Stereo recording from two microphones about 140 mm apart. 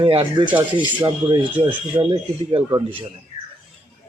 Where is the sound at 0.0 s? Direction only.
40° right (ahead or behind).